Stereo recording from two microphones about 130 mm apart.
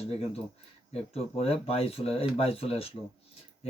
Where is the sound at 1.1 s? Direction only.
50° left (ahead or behind).